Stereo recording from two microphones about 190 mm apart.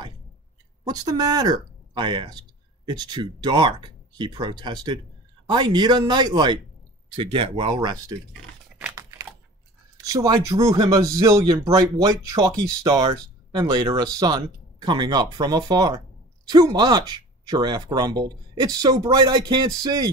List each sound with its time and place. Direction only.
0.8 s speech: 20° right (ahead or behind)
8.7 s typing: 10° right (ahead or behind)
10.0 s speech: 15° right (ahead or behind)